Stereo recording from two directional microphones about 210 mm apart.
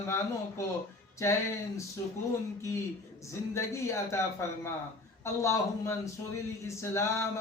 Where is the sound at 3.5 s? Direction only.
15° left (ahead or behind).